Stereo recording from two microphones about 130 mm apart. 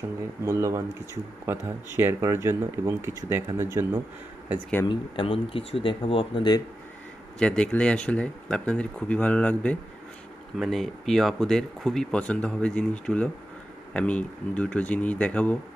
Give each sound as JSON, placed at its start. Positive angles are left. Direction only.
{"t": 0.5, "sound": "speech", "side_deg": -25}
{"t": 4.8, "sound": "speech", "side_deg": 40}
{"t": 7.3, "sound": "speech", "side_deg": 10}